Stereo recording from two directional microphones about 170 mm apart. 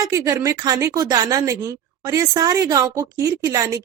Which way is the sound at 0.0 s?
20° right (ahead or behind).